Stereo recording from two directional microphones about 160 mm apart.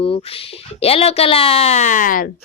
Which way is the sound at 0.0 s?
35° left (ahead or behind).